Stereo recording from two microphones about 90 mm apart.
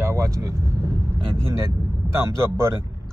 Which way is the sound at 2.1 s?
30° right (ahead or behind).